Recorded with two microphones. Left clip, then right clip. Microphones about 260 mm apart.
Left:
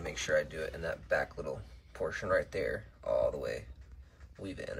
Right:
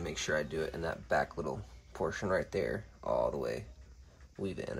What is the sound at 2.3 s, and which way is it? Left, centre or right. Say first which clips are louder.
Speech: left 3 dB; right.